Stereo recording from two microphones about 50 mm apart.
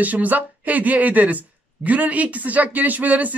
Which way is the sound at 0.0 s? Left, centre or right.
Right.